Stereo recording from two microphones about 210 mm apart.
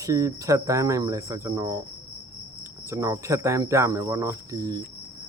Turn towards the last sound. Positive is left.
turn(degrees=-15)  # may be behind; listen again after turning